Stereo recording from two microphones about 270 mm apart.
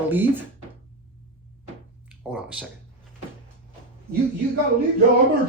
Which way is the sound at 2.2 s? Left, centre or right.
Centre.